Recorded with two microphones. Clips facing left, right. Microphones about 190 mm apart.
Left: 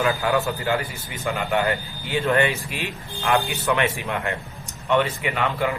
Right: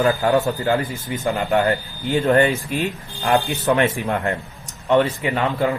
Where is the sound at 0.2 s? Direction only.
35° right (ahead or behind).